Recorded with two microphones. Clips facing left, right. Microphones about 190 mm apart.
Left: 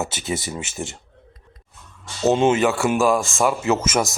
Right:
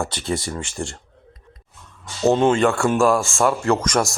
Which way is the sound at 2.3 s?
25° left (ahead or behind).